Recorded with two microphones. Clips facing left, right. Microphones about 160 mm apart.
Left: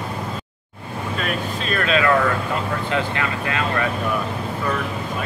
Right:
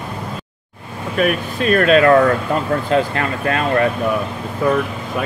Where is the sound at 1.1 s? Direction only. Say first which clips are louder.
Right 9 dB; 55° right (ahead or behind); by 3.8 s 40° right (ahead or behind).